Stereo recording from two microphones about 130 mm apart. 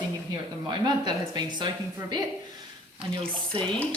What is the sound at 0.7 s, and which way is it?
Speech, 35° right (ahead or behind).